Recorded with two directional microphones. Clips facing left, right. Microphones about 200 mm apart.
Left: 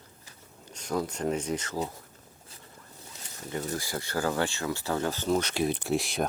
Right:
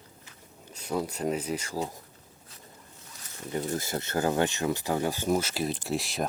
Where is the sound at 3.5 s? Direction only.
25° right (ahead or behind); by 6.3 s centre (ahead or behind).